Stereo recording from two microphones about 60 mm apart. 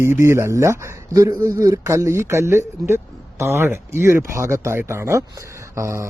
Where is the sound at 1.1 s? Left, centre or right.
Right.